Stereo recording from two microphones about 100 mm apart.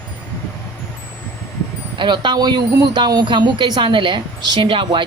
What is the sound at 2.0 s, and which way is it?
Speech, 50° right (ahead or behind).